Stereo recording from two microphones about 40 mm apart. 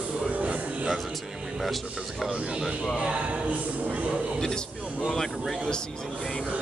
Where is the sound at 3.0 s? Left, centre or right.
Right.